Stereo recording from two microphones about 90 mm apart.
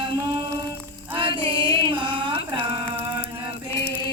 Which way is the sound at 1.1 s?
65° right (ahead or behind).